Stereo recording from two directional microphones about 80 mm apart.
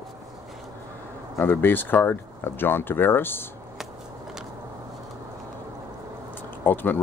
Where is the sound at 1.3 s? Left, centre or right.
Left.